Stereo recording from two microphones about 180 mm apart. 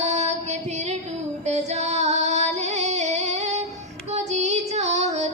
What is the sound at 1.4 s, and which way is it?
Music, 40° right (ahead or behind).